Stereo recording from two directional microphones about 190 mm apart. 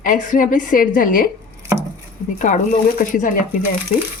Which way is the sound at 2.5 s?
40° left (ahead or behind).